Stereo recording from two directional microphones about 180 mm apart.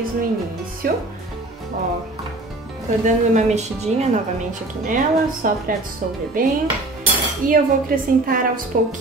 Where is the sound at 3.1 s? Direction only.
40° right (ahead or behind).